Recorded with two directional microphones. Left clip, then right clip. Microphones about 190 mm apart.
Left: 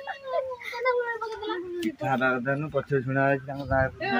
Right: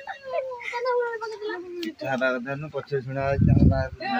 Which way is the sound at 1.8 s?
60° left (ahead or behind).